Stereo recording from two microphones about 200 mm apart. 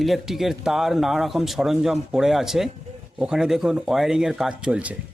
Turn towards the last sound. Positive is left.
turn(degrees=-5)  # may be behind; listen again after turning